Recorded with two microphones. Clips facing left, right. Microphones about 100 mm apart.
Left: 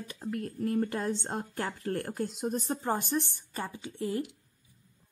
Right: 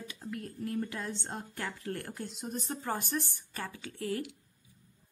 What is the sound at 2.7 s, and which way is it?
A woman's voice, 25° left (ahead or behind).